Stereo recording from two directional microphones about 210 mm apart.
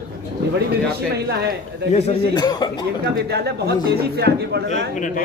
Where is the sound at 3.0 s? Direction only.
50° right (ahead or behind).